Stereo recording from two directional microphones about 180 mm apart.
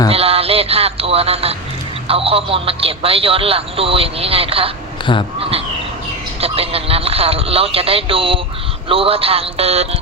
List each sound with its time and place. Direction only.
0.1 s speech: 35° right (ahead or behind)
6.4 s speech: 35° right (ahead or behind)